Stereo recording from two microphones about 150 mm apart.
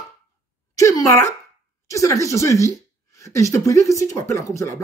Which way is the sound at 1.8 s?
20° left (ahead or behind).